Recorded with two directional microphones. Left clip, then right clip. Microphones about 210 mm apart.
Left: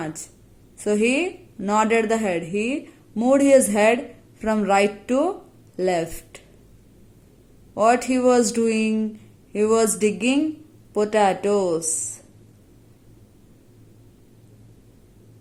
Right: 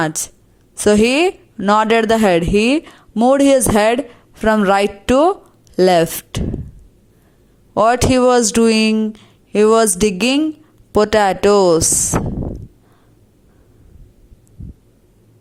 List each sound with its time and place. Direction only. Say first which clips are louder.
0.8 s speech: right 8 dB; 40° right (ahead or behind)
7.7 s speech: right 6 dB; 35° right (ahead or behind)